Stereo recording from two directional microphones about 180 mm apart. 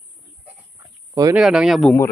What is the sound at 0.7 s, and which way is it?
Dog, 20° right (ahead or behind).